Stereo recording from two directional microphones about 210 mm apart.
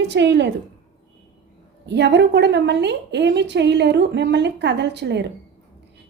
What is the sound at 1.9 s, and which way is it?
A woman's voice, 55° right (ahead or behind).